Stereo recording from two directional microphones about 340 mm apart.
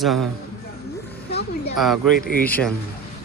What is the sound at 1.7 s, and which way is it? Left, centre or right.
Speech, centre.